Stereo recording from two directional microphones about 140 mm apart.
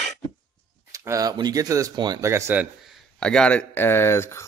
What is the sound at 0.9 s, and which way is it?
Speech, 20° right (ahead or behind).